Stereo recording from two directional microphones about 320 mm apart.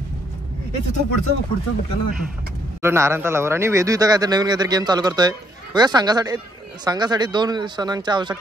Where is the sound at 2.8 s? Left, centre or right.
Centre.